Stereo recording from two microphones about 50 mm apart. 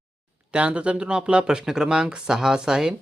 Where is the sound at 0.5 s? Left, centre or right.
Right.